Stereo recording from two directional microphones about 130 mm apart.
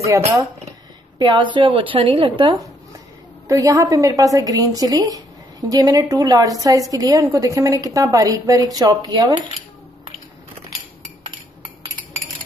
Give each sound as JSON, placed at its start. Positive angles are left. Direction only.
{"t": 0.4, "sound": "speech", "side_deg": -30}
{"t": 3.4, "sound": "a woman's voice", "side_deg": -25}